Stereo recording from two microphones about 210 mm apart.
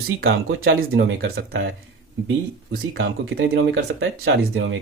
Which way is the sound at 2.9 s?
55° right (ahead or behind).